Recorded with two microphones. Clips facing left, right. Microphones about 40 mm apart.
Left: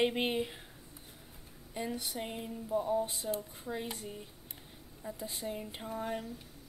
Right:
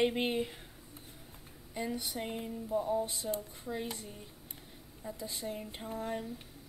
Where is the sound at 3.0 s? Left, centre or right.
Left.